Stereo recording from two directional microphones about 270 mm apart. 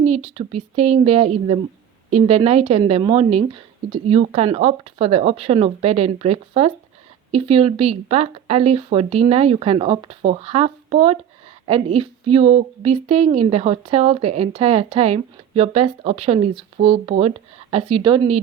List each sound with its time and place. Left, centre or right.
0.0 s a woman's voice: right